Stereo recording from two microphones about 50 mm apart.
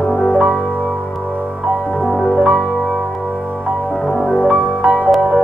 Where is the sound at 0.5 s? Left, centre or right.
Centre.